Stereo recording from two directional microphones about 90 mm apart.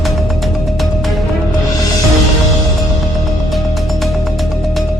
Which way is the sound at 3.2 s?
Centre (ahead or behind).